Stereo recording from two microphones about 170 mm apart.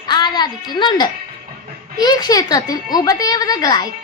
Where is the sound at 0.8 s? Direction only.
25° left (ahead or behind).